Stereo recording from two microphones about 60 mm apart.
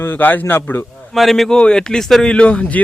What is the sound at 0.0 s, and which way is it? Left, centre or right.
Speech, left.